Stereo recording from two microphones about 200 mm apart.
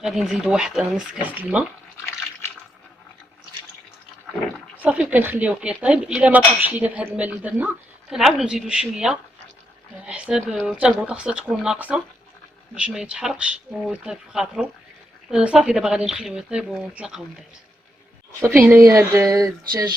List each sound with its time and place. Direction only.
0.0 s a woman's voice: centre (ahead or behind)
4.8 s a woman's voice: 5° right (ahead or behind)
18.7 s speech: 15° right (ahead or behind)